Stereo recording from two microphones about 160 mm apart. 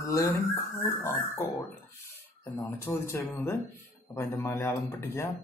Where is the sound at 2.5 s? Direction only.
15° left (ahead or behind).